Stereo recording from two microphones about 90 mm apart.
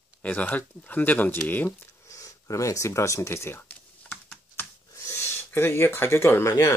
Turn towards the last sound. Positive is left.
turn(degrees=30)  # may be behind; listen again after turning